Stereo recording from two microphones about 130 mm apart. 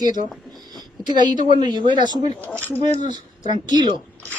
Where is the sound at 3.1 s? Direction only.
35° right (ahead or behind).